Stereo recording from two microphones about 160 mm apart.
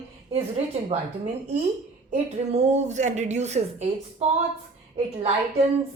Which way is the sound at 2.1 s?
45° right (ahead or behind).